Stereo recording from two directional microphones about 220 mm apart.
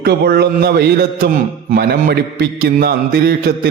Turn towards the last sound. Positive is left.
turn(degrees=-45)  # may be behind; listen again after turning